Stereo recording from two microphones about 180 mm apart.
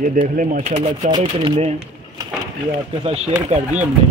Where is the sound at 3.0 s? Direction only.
35° right (ahead or behind).